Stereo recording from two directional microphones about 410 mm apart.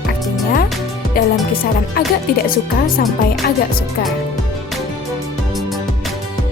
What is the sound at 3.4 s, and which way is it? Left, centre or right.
Speech, left.